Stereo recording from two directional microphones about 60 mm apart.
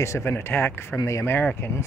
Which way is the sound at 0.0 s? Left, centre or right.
Left.